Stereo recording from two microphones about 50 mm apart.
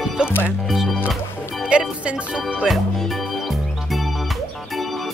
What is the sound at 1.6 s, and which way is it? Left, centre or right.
Music, right.